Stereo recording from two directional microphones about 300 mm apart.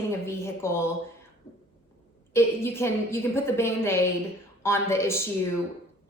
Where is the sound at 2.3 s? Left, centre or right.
Centre.